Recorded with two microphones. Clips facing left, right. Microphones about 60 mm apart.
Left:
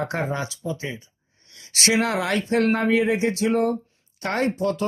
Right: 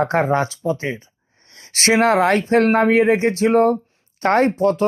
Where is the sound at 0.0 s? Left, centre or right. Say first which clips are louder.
Right 9 dB; right.